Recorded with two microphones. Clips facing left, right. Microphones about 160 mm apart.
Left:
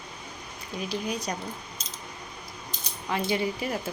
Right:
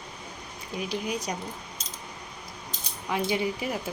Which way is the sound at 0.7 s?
15° right (ahead or behind).